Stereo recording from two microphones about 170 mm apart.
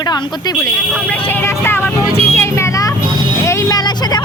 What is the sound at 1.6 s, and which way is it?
Vehicle, 15° left (ahead or behind).